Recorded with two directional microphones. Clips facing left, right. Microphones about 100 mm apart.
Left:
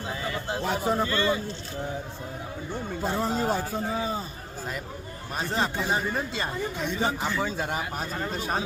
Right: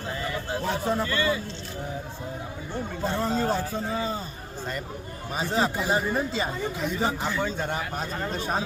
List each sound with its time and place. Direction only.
0.1 s a sound: 20° left (ahead or behind)
1.0 s speech: 25° left (ahead or behind)
3.0 s a man's voice: 10° left (ahead or behind)
5.3 s speech: centre (ahead or behind)